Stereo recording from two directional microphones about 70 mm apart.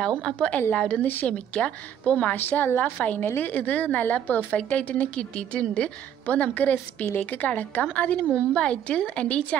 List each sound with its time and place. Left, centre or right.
0.2 s a woman's voice: centre